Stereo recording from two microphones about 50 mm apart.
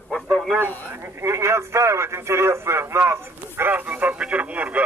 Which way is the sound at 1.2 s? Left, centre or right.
Right.